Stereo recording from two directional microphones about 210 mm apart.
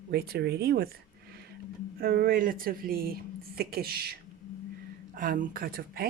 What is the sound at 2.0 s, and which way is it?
Speech, 45° right (ahead or behind).